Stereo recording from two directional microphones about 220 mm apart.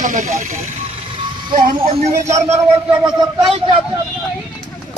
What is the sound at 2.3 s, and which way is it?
Speech, 30° right (ahead or behind).